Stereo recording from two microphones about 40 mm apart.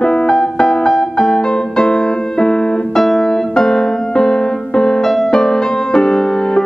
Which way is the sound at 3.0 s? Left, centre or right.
Centre.